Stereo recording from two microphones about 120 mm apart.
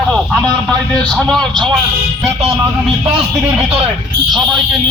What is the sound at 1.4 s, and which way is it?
Speech, 40° right (ahead or behind).